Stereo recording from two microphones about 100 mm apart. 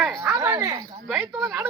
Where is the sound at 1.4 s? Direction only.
Centre (ahead or behind).